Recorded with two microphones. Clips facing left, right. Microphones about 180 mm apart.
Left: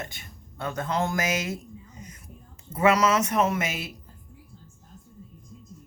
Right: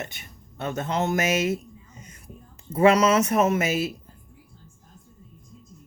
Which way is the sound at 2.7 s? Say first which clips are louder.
Right 3 dB; 30° right (ahead or behind).